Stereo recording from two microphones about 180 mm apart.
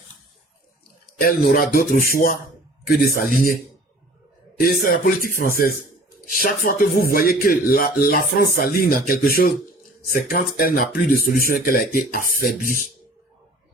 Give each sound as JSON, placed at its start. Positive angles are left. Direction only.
{"t": 1.2, "sound": "speech", "side_deg": 55}
{"t": 4.8, "sound": "speech", "side_deg": 50}